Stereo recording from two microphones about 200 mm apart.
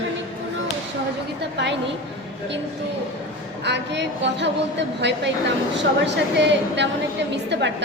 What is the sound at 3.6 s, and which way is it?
A woman's voice, 60° right (ahead or behind).